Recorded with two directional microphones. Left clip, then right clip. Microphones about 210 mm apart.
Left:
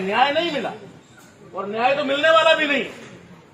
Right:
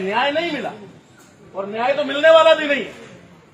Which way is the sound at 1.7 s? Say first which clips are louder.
Even; 10° right (ahead or behind).